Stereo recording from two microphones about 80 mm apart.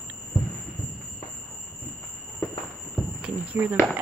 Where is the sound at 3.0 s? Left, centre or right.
Centre.